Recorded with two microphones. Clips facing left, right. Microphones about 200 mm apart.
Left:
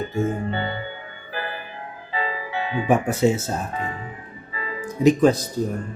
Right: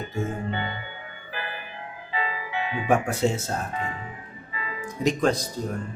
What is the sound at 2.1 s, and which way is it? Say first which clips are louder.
Music: left 3 dB; 35° left (ahead or behind).